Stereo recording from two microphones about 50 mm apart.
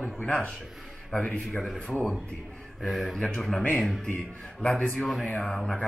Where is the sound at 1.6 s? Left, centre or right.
Centre.